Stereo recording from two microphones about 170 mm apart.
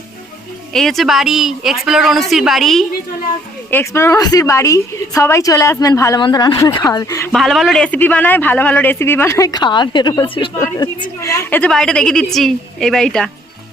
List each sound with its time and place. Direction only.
0.7 s a woman's voice: centre (ahead or behind)
3.7 s a man's voice: 15° left (ahead or behind)
7.3 s a man's voice: centre (ahead or behind)